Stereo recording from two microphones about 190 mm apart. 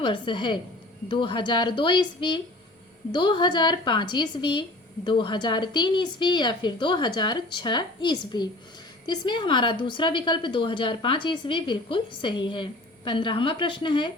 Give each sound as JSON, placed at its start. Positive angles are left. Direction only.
{"t": 0.0, "sound": "a woman's voice", "side_deg": 25}